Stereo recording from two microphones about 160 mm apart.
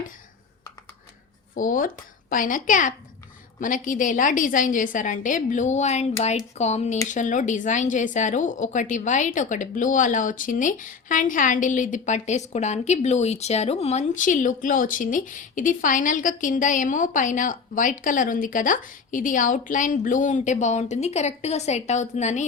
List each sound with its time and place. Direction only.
1.5 s a woman's voice: 60° left (ahead or behind)